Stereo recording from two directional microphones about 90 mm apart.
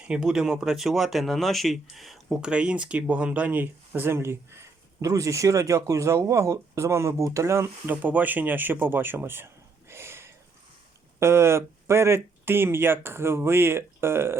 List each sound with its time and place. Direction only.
0.0 s speech: 10° right (ahead or behind); by 7.9 s 30° right (ahead or behind)
8.0 s speech: 20° right (ahead or behind)
9.9 s a sound: 30° right (ahead or behind)
11.2 s speech: 30° right (ahead or behind)